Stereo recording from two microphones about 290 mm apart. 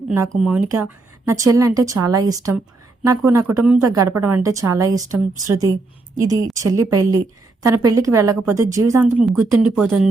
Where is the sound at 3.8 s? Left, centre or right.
Right.